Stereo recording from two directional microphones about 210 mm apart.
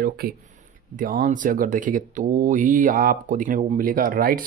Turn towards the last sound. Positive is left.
turn(degrees=-40)  # may be behind; listen again after turning